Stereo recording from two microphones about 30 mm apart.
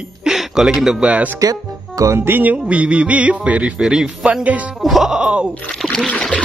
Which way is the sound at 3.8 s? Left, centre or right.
Right.